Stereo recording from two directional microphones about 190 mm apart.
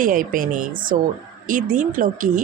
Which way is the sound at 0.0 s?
45° right (ahead or behind).